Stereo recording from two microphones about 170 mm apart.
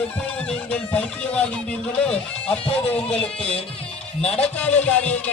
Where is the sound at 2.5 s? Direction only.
35° left (ahead or behind).